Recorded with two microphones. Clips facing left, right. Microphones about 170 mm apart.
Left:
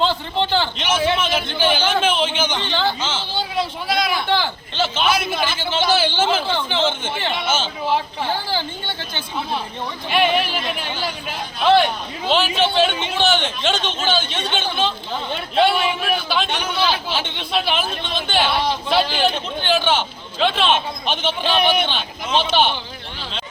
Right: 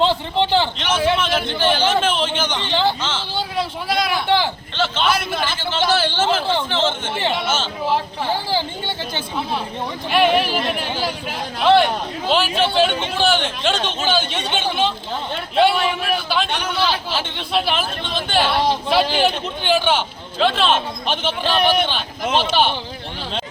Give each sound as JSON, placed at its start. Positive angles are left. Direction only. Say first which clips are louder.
{"t": 0.0, "sound": "a man's voice", "louder": "right 2 dB", "side_deg": -25}
{"t": 0.8, "sound": "a man's voice", "louder": "right 1 dB", "side_deg": 5}
{"t": 3.6, "sound": "a sound", "louder": "even", "side_deg": -5}
{"t": 4.8, "sound": "a man's voice", "louder": "even", "side_deg": 5}
{"t": 10.1, "sound": "a man's voice", "louder": "right 2 dB", "side_deg": -5}
{"t": 19.6, "sound": "a man's voice", "louder": "right 1 dB", "side_deg": -10}